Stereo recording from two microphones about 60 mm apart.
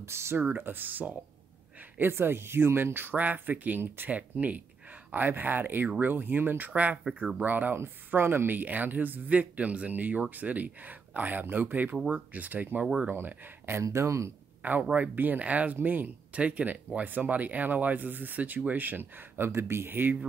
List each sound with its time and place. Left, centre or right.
0.0 s speech: right
0.5 s speech: right
6.7 s speech: right
7.1 s speech: centre
7.4 s speech: right
13.1 s speech: right
13.8 s speech: right
14.6 s speech: right